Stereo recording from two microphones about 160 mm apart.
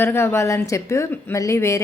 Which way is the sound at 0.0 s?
15° left (ahead or behind).